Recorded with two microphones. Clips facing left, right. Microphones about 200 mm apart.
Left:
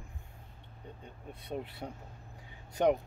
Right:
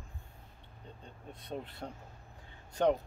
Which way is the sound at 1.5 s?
10° left (ahead or behind).